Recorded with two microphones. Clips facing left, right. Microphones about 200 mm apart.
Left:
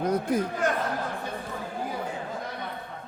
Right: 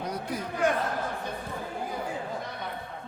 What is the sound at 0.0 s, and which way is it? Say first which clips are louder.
Speech: left 8 dB; 50° left (ahead or behind).